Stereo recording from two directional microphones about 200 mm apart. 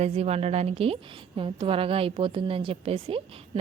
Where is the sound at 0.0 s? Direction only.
30° right (ahead or behind).